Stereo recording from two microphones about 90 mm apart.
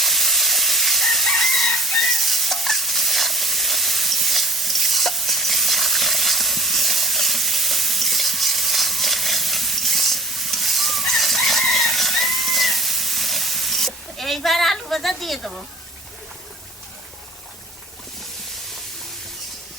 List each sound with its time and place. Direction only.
0.0 s crowing: centre (ahead or behind)